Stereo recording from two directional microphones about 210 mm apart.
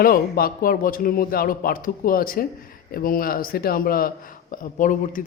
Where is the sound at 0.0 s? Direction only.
45° left (ahead or behind).